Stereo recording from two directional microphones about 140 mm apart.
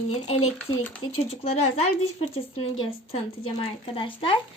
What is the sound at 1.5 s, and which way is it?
Speech, 50° left (ahead or behind).